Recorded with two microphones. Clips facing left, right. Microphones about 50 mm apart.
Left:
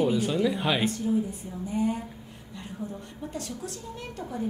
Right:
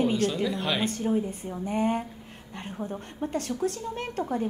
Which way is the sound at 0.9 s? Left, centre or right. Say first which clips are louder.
Even; right.